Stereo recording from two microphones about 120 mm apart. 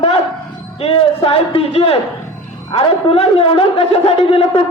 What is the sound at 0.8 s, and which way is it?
A man's voice, 50° left (ahead or behind).